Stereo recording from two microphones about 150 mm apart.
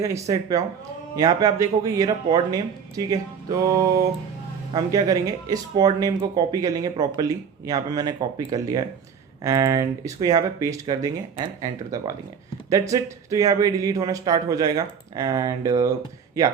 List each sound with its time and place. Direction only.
0.0 s speech: 20° right (ahead or behind)